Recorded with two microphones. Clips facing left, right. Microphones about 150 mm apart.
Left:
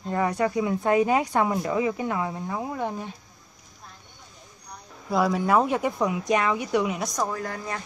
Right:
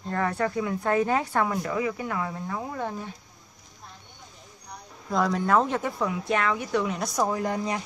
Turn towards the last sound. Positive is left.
turn(degrees=-20)  # may be behind; listen again after turning